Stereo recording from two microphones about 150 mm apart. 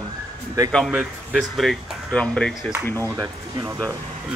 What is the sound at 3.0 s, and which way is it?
Speech, 20° right (ahead or behind).